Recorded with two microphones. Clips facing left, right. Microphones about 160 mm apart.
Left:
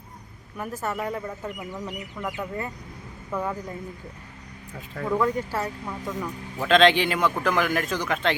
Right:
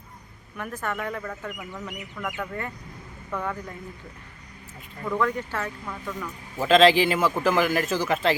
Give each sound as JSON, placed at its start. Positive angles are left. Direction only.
{"t": 0.6, "sound": "speech", "side_deg": 10}
{"t": 5.1, "sound": "speech", "side_deg": 10}
{"t": 6.6, "sound": "a man's voice", "side_deg": -5}